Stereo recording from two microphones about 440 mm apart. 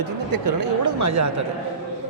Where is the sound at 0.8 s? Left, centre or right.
Right.